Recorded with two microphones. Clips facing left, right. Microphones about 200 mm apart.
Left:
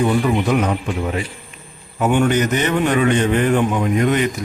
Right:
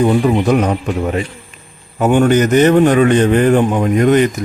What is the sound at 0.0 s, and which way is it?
A man's voice, 40° right (ahead or behind).